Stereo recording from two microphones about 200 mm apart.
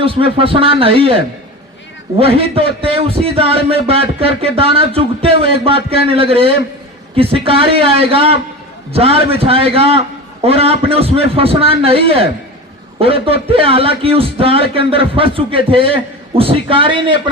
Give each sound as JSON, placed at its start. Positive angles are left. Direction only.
{"t": 0.0, "sound": "a man's voice", "side_deg": -25}